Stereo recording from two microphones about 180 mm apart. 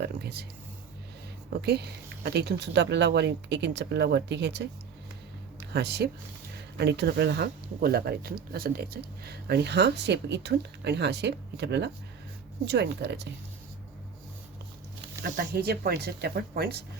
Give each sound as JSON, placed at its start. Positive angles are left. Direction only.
{"t": 0.0, "sound": "speech", "side_deg": -65}
{"t": 1.6, "sound": "speech", "side_deg": -65}
{"t": 5.7, "sound": "speech", "side_deg": -65}
{"t": 15.2, "sound": "speech", "side_deg": -60}